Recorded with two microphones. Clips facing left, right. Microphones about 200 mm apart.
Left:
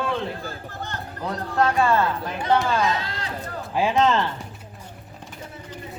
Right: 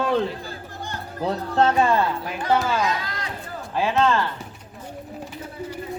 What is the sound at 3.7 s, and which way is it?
Speech, 15° left (ahead or behind).